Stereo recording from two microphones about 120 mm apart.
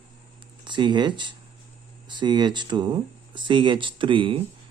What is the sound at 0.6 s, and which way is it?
Speech, 40° right (ahead or behind).